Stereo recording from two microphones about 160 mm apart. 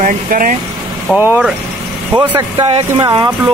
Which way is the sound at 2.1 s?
30° right (ahead or behind).